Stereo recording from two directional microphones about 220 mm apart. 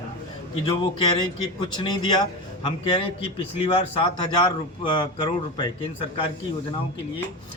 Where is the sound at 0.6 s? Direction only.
20° left (ahead or behind).